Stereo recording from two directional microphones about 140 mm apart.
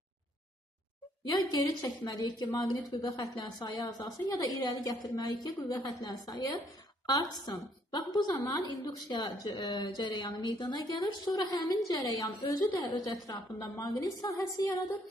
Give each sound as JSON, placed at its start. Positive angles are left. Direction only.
{"t": 1.4, "sound": "a woman's voice", "side_deg": 25}